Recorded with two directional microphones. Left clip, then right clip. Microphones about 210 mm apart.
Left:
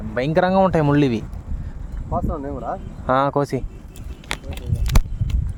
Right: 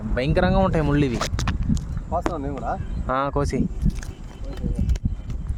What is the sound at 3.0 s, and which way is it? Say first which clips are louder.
Speech: left 5 dB; 15° left (ahead or behind).